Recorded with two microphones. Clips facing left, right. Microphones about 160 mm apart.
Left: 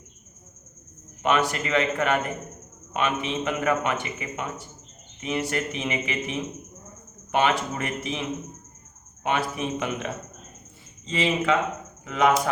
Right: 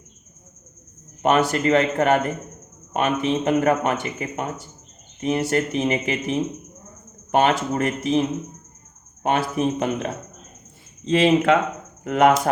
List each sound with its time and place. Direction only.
1.2 s a man's voice: 45° right (ahead or behind)
11.0 s speech: 60° right (ahead or behind)